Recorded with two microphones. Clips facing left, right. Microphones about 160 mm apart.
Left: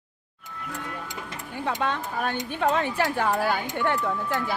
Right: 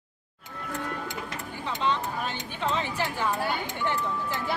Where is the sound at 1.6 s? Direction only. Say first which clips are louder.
Left 1 dB; 55° left (ahead or behind).